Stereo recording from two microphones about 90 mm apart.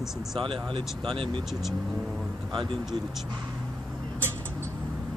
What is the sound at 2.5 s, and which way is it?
Speech, 70° right (ahead or behind).